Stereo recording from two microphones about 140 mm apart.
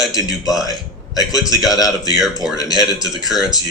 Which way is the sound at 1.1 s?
25° left (ahead or behind).